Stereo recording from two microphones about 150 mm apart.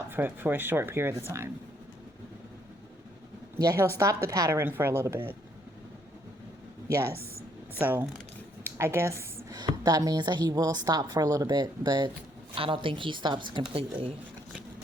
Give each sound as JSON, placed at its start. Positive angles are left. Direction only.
{"t": 0.0, "sound": "speech", "side_deg": -15}
{"t": 3.6, "sound": "a woman's voice", "side_deg": -20}
{"t": 6.8, "sound": "a woman's voice", "side_deg": -20}
{"t": 8.6, "sound": "a sound", "side_deg": -15}
{"t": 9.6, "sound": "a woman's voice", "side_deg": -25}